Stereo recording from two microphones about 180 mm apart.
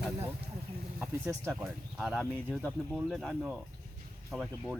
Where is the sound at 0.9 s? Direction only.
5° right (ahead or behind).